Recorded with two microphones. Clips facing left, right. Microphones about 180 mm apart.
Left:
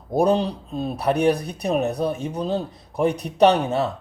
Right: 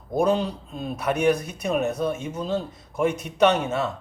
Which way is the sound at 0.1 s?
35° left (ahead or behind).